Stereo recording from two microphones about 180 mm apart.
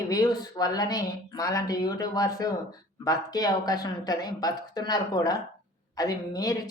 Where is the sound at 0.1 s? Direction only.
20° left (ahead or behind).